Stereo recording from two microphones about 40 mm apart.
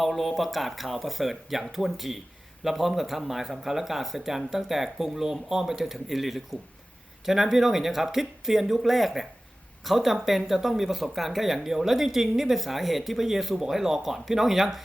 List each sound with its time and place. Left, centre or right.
0.0 s speech: centre